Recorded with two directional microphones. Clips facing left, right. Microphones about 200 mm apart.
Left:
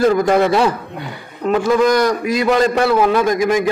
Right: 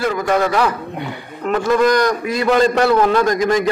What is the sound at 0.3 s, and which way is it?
Speech, 25° left (ahead or behind).